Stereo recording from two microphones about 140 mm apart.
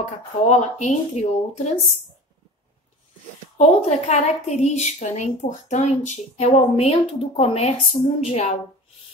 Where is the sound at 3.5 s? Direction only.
50° left (ahead or behind).